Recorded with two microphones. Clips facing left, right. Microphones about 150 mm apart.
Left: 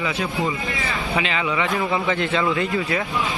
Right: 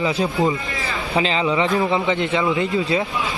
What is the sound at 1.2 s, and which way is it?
A man's voice, 30° right (ahead or behind).